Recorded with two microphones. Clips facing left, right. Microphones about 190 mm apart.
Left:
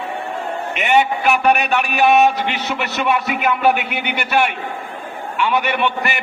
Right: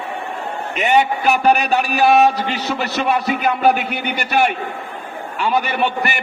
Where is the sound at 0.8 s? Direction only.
40° right (ahead or behind).